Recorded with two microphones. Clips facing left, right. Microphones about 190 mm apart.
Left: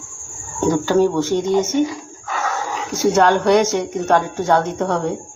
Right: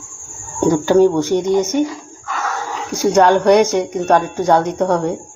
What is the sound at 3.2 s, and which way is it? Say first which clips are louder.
Speech: right 3 dB; 50° right (ahead or behind).